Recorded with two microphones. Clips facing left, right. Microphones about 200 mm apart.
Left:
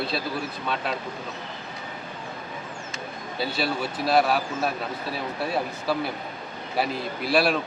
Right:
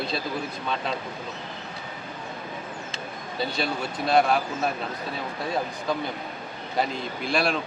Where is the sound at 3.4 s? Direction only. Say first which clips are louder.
Left 1 dB; 5° left (ahead or behind).